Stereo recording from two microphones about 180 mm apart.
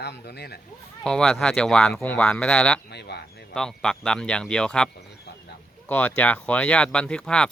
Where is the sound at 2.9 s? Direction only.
65° left (ahead or behind).